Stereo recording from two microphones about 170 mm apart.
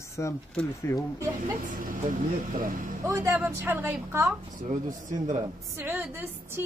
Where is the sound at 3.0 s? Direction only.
15° right (ahead or behind).